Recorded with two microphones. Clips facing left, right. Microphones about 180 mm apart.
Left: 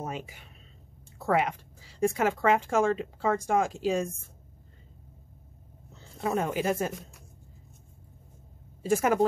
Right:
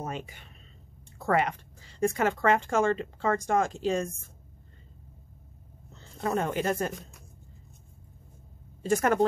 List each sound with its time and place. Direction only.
0.0 s a woman's voice: 5° left (ahead or behind)
5.9 s speech: 5° left (ahead or behind)
8.8 s a woman's voice: 5° left (ahead or behind)